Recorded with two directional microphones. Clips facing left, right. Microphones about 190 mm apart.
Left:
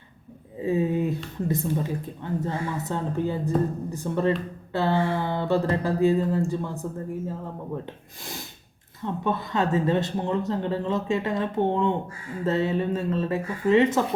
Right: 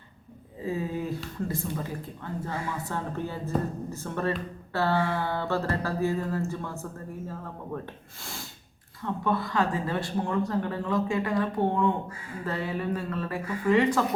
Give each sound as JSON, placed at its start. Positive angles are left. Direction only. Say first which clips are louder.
{"t": 0.6, "sound": "speech", "louder": "left 7 dB", "side_deg": 20}
{"t": 8.2, "sound": "speech", "louder": "left 3 dB", "side_deg": 20}